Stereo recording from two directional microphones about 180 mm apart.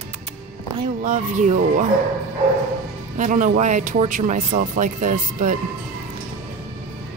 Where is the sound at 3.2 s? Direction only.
45° right (ahead or behind).